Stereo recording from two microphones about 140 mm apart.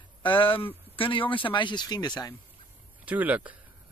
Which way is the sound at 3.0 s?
10° right (ahead or behind).